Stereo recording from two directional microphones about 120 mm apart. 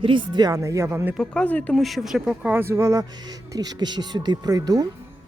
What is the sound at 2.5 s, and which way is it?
A woman's voice, 20° right (ahead or behind).